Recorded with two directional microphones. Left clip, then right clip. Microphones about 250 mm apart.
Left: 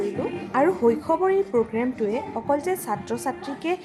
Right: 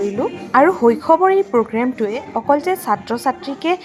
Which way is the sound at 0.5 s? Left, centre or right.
Centre.